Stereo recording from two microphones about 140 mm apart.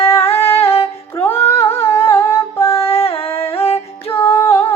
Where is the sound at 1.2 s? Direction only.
15° left (ahead or behind).